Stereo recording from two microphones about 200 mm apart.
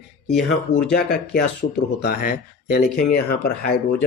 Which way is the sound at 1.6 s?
90° left.